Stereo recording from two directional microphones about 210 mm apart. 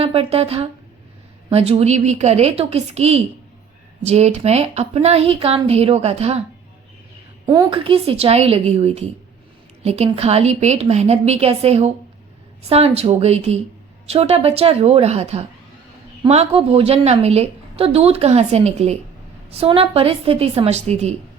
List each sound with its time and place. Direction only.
0.0 s a woman's voice: 30° right (ahead or behind)
7.4 s a woman's voice: 20° right (ahead or behind)